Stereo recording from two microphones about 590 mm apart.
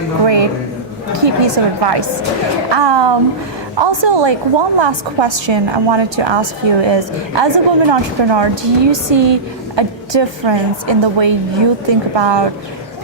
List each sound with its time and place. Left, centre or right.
1.1 s a woman's voice: right